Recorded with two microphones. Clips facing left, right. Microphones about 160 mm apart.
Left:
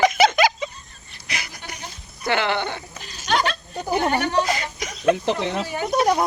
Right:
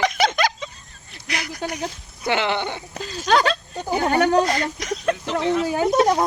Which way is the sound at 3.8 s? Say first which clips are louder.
Right 1 dB; 10° left (ahead or behind).